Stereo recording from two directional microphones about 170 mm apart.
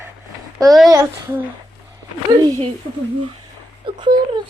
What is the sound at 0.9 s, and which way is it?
Speech, 15° right (ahead or behind).